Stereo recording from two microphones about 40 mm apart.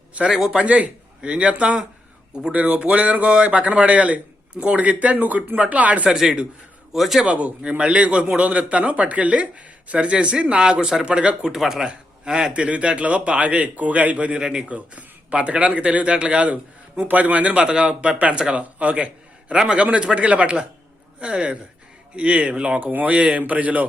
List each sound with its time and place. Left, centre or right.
0.3 s speech: centre
0.6 s a man's voice: right
6.1 s a man's voice: centre
7.3 s a man's voice: right
8.4 s a man's voice: right
10.6 s a man's voice: centre
12.5 s a man's voice: right
17.0 s a man's voice: right
22.8 s speech: right
23.1 s a man's voice: right